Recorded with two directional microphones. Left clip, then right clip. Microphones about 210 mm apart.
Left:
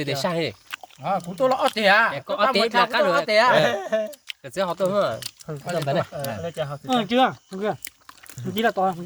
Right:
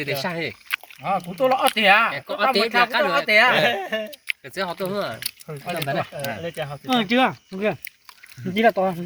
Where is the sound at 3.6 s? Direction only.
20° right (ahead or behind).